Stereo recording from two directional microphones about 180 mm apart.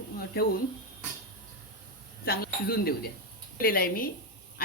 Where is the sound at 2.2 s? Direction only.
55° left (ahead or behind).